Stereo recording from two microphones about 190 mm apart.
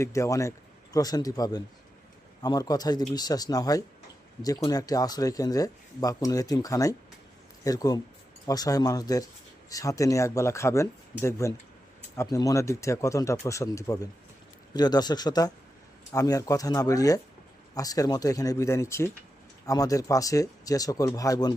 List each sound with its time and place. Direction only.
0.0 s speech: 15° left (ahead or behind)